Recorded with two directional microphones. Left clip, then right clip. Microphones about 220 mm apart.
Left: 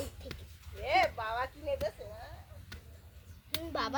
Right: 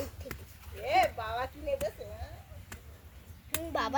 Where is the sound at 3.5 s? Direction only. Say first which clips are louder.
Right 2 dB; centre (ahead or behind).